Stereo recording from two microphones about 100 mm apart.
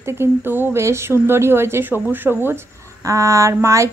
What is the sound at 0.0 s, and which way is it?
A woman's voice, 25° right (ahead or behind).